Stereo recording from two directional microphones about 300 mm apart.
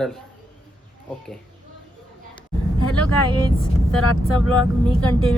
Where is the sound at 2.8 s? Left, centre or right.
Left.